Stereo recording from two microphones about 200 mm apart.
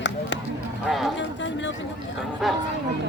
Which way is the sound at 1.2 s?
65° left (ahead or behind).